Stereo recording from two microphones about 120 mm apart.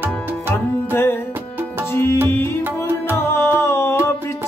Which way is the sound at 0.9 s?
20° left (ahead or behind).